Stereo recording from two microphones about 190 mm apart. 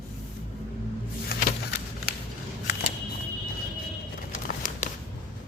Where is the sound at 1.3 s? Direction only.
55° left (ahead or behind).